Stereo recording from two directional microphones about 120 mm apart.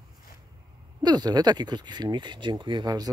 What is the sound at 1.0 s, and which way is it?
Speech, 35° right (ahead or behind).